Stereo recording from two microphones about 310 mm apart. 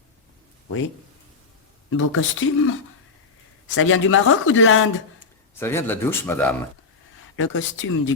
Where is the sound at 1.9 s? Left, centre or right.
Left.